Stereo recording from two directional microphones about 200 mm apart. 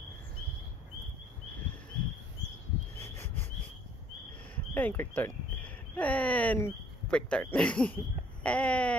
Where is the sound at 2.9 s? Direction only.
10° left (ahead or behind).